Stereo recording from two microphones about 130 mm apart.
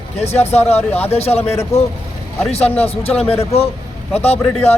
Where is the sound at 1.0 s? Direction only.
50° left (ahead or behind).